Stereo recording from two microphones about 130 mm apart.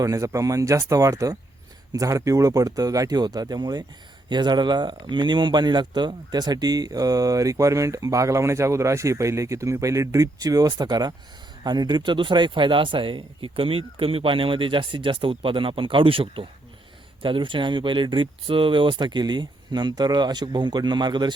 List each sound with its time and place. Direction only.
0.0 s speech: 25° right (ahead or behind)